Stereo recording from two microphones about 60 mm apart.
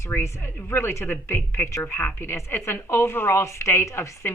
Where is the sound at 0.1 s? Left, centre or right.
Left.